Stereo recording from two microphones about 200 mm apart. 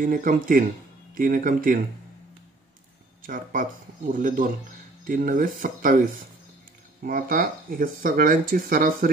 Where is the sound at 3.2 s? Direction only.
40° right (ahead or behind).